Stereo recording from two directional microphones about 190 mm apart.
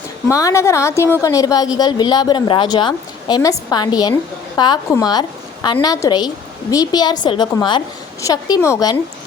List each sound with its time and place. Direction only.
0.3 s a woman's voice: 15° left (ahead or behind)